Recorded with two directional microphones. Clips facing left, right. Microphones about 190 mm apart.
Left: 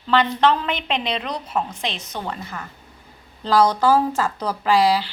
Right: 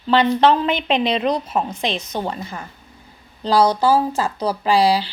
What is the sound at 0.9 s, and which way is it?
Speech, 10° right (ahead or behind).